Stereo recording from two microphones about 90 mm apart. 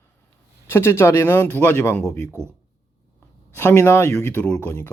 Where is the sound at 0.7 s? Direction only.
25° left (ahead or behind).